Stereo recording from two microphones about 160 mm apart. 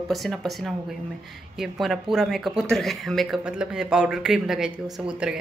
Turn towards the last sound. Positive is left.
turn(degrees=-5)  # may be behind; listen again after turning